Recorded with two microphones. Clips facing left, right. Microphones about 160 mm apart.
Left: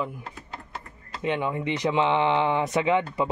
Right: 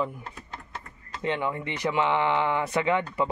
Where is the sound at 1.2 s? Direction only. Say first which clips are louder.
Left 2 dB; 15° left (ahead or behind).